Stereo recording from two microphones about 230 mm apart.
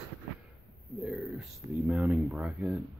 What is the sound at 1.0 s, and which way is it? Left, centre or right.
Speech, centre.